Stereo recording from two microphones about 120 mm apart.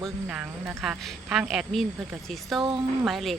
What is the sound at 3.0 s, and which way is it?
Speech, centre (ahead or behind).